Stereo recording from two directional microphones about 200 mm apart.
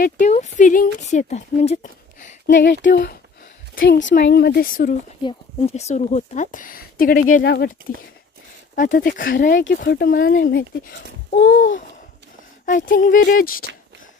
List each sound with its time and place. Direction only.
0.0 s speech: 40° left (ahead or behind)
2.5 s speech: 65° left (ahead or behind)
4.1 s a child's voice: 55° left (ahead or behind)
5.2 s speech: 30° left (ahead or behind); by 7.7 s 50° left (ahead or behind)
8.7 s a child's voice: 40° left (ahead or behind)
9.8 s a child's voice: 50° left (ahead or behind)